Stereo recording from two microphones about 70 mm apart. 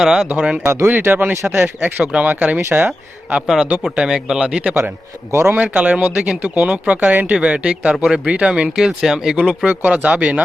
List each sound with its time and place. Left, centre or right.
0.0 s speech: centre
0.6 s speech: right
0.9 s speech: right
2.2 s speech: right
3.4 s speech: centre
5.3 s speech: right
5.5 s speech: centre
9.6 s speech: right